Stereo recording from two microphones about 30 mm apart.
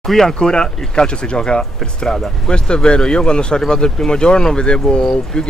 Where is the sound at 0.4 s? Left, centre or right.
Left.